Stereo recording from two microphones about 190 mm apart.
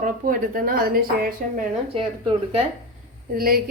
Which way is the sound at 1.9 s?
30° right (ahead or behind).